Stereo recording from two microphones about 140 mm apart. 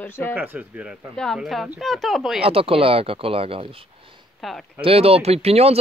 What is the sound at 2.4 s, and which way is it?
Speech, 40° right (ahead or behind).